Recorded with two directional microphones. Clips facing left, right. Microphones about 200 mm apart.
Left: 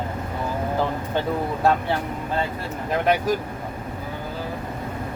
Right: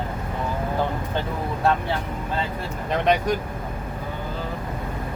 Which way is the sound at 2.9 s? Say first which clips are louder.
Even; 5° left (ahead or behind).